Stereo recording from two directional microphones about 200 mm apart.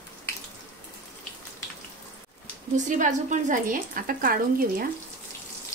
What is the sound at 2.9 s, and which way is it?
A woman's voice, 40° right (ahead or behind).